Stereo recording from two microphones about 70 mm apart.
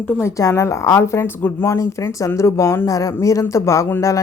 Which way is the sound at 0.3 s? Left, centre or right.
Left.